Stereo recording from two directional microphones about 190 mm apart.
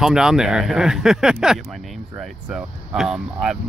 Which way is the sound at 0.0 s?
5° right (ahead or behind).